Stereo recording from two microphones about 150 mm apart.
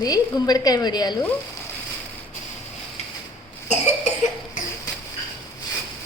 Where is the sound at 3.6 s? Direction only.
50° left (ahead or behind).